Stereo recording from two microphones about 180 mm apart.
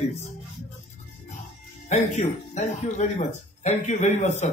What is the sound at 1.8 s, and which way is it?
Speech, 40° left (ahead or behind).